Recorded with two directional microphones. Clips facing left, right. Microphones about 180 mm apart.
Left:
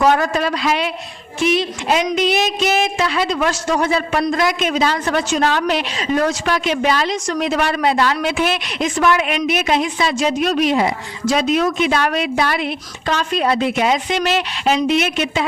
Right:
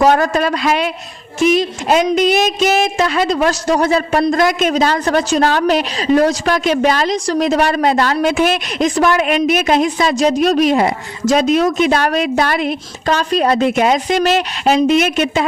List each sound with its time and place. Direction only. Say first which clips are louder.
0.0 s a woman's voice: right 3 dB; 45° right (ahead or behind)